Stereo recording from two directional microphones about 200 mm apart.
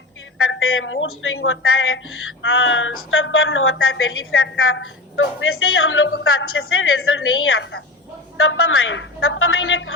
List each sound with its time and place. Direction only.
0.3 s a woman's voice: 90° left
8.4 s speech: 90° left